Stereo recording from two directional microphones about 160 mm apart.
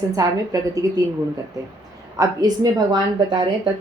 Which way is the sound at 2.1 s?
25° right (ahead or behind).